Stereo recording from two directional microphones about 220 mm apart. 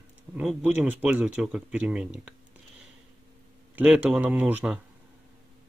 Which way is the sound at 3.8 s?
5° right (ahead or behind).